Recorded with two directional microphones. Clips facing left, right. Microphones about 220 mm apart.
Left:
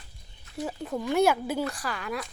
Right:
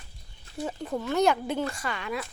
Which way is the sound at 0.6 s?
Centre (ahead or behind).